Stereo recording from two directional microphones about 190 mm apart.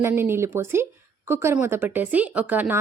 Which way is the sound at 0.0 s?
10° right (ahead or behind).